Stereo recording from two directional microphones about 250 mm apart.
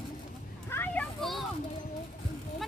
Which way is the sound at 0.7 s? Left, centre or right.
Centre.